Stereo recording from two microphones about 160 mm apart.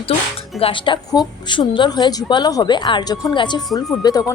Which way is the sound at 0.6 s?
30° left (ahead or behind).